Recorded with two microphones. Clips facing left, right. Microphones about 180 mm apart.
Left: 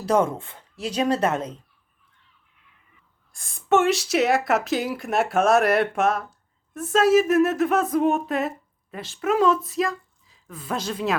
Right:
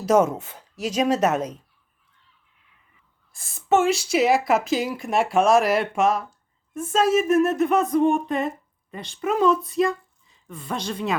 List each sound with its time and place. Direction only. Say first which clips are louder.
0.9 s speech: right 1 dB; 10° right (ahead or behind)
1.3 s speech: right 2 dB; 25° left (ahead or behind)
3.3 s speech: even; centre (ahead or behind)